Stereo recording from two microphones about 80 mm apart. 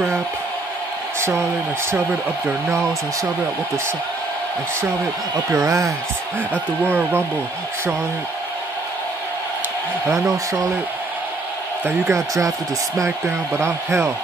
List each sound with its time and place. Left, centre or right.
5.5 s speech: right
11.8 s speech: right
13.6 s speech: right